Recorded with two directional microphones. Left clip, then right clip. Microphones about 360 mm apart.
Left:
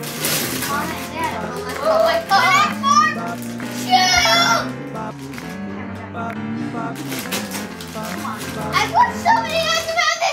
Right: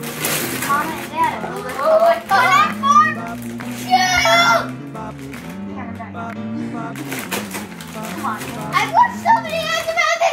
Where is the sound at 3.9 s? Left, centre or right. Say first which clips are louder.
Right 1 dB; centre.